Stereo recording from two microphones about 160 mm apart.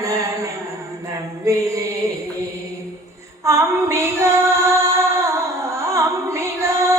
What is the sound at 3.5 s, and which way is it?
Female singing, 15° right (ahead or behind).